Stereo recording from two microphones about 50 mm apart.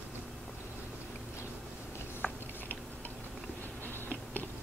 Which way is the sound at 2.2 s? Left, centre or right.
Left.